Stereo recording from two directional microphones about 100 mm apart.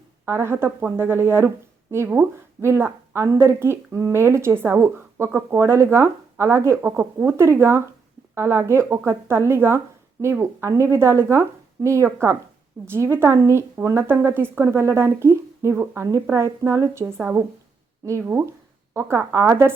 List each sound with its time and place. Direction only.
0.3 s speech: 25° right (ahead or behind)